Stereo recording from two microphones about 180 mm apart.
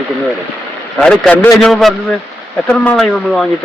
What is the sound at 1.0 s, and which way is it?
A man's voice, 5° left (ahead or behind).